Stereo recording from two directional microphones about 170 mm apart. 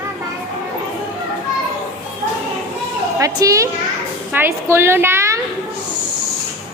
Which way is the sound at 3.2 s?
20° right (ahead or behind).